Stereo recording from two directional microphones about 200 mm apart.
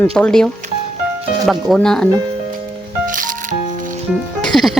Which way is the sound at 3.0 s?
40° right (ahead or behind).